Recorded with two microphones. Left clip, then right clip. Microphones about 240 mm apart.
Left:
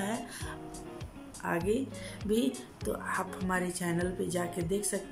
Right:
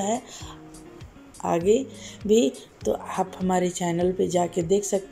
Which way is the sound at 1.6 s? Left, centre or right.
Centre.